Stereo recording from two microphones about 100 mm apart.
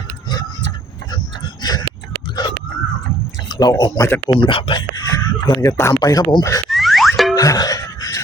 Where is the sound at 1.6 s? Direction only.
40° left (ahead or behind).